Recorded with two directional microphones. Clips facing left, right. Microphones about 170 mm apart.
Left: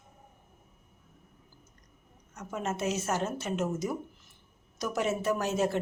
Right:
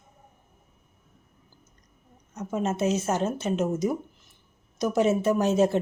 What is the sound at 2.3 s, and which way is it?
A woman's voice, 20° right (ahead or behind).